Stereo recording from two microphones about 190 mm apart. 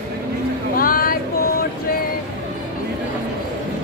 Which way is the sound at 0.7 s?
50° left (ahead or behind).